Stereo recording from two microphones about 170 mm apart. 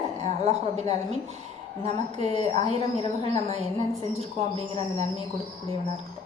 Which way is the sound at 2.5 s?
30° left (ahead or behind).